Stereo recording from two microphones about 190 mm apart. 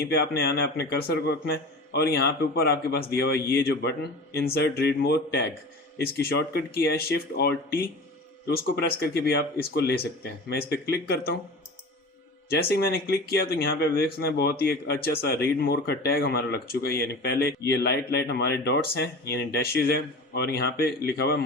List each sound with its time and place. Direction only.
0.4 s a man's voice: 50° left (ahead or behind)
12.5 s a man's voice: 55° left (ahead or behind)